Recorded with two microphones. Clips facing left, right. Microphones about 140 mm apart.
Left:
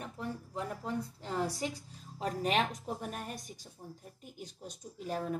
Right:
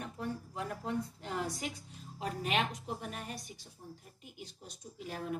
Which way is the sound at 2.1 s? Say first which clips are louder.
Left 3 dB; 35° left (ahead or behind).